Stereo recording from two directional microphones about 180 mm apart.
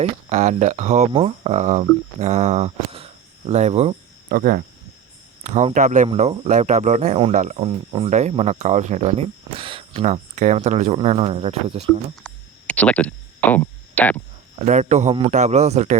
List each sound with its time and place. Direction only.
0.0 s speech: 40° right (ahead or behind)
4.3 s speech: 50° right (ahead or behind)
5.4 s speech: 40° right (ahead or behind)
12.2 s a sound: 5° left (ahead or behind)
14.6 s speech: 40° right (ahead or behind)